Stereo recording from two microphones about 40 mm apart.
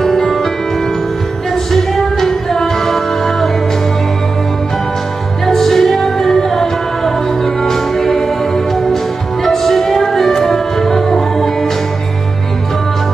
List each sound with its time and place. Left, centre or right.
0.0 s music: centre
1.5 s music: centre
5.5 s music: centre